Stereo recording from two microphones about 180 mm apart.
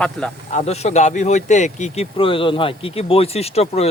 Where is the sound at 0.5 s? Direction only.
35° left (ahead or behind).